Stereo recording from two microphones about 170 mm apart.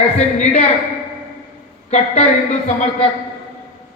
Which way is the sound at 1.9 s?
40° left (ahead or behind).